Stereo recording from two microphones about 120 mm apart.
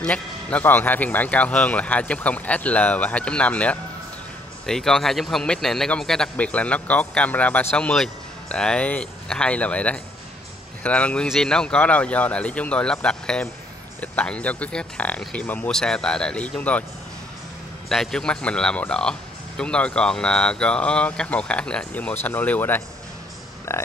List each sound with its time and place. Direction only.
0.0 s a man's voice: 10° left (ahead or behind)
17.8 s a man's voice: centre (ahead or behind); by 23.8 s 20° left (ahead or behind)